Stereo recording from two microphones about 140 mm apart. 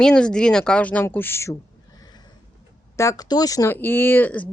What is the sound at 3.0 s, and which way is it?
Speech, 25° left (ahead or behind).